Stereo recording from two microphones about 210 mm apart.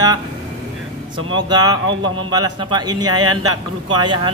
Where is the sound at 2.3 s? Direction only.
20° right (ahead or behind).